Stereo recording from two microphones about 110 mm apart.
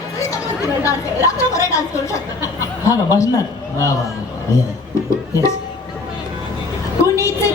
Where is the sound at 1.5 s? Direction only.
30° left (ahead or behind).